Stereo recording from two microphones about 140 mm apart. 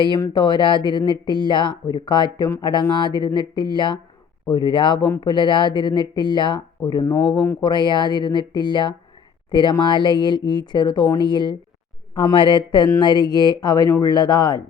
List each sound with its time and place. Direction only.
0.0 s speech: 35° left (ahead or behind)